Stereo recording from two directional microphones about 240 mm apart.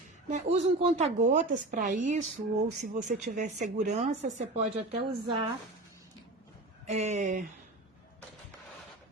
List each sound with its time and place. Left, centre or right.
0.3 s speech: right
6.9 s speech: right